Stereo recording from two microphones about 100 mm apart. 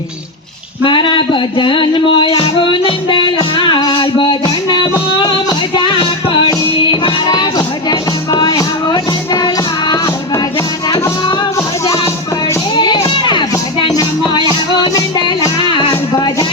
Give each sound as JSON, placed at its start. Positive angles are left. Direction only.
{"t": 0.9, "sound": "a sound", "side_deg": 55}
{"t": 2.4, "sound": "music", "side_deg": 60}
{"t": 7.9, "sound": "music", "side_deg": 40}
{"t": 12.7, "sound": "music", "side_deg": 50}
{"t": 13.9, "sound": "music", "side_deg": 40}
{"t": 15.7, "sound": "music", "side_deg": 50}